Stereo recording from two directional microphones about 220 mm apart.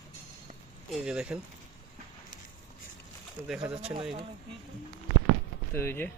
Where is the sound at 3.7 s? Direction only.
25° right (ahead or behind).